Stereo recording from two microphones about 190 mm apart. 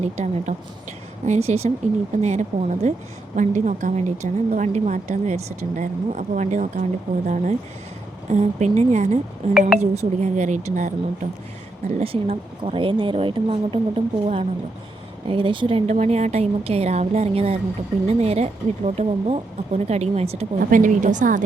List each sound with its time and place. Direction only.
0.0 s a woman's voice: 35° right (ahead or behind)
20.6 s a woman's voice: 45° right (ahead or behind)